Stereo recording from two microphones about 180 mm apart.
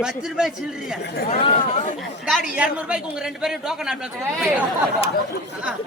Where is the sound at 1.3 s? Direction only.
35° left (ahead or behind).